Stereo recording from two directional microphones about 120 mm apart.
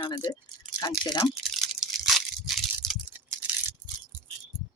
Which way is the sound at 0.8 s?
30° left (ahead or behind).